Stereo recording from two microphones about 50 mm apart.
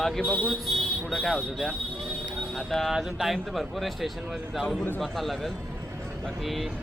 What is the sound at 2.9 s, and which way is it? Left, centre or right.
Speech, centre.